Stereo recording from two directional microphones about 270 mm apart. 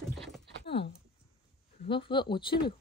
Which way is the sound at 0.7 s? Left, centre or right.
Left.